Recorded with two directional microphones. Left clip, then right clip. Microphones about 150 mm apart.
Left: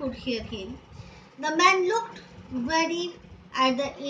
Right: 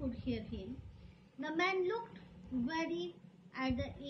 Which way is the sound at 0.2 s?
10° left (ahead or behind).